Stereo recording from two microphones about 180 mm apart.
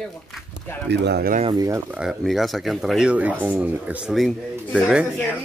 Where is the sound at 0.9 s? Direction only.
70° right (ahead or behind).